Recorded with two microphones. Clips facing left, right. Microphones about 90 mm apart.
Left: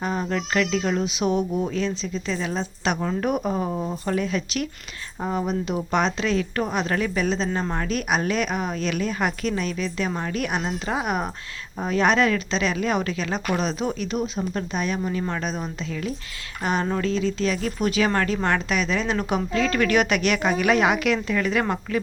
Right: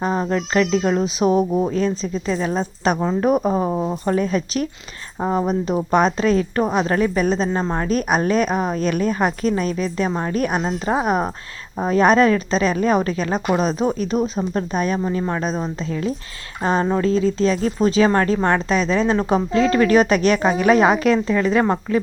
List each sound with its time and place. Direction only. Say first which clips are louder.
0.0 s a woman's voice: right 5 dB; 35° right (ahead or behind)
3.0 s a woman's voice: right 7 dB; 30° right (ahead or behind)
3.3 s a woman's voice: right 6 dB; 40° right (ahead or behind)
4.0 s a woman's voice: right 4 dB; 35° right (ahead or behind)